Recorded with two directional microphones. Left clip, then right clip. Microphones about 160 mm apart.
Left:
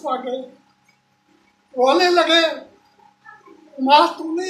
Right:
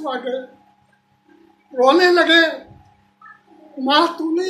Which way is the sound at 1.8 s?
20° right (ahead or behind).